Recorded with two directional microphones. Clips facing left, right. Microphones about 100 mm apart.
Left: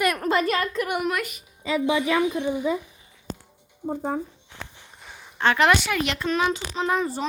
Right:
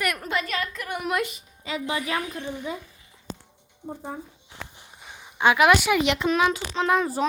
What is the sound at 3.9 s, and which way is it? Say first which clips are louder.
Speech: left 8 dB; 90° left.